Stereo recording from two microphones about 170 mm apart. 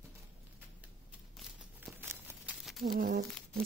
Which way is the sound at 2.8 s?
60° right (ahead or behind).